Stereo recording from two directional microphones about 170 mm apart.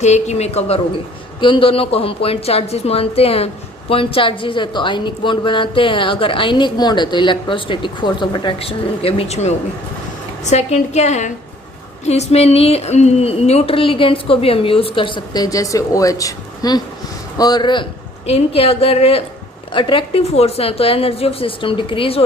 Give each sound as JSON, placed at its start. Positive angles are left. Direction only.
{"t": 0.0, "sound": "a woman's voice", "side_deg": 40}